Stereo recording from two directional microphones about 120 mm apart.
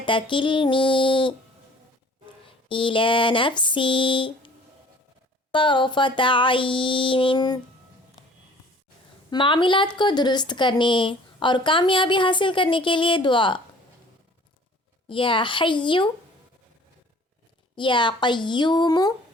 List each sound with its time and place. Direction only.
0.0 s a woman's voice: 45° left (ahead or behind)
2.6 s a woman's voice: 45° left (ahead or behind)
9.3 s a woman's voice: 40° left (ahead or behind)
15.0 s a woman's voice: 45° left (ahead or behind)
17.7 s a child's voice: 40° left (ahead or behind)